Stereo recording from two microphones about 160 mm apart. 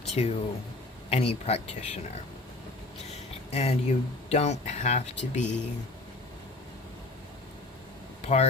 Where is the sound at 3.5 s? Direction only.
40° left (ahead or behind).